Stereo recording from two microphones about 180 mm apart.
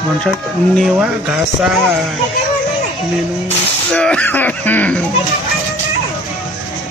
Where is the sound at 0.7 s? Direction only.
5° right (ahead or behind).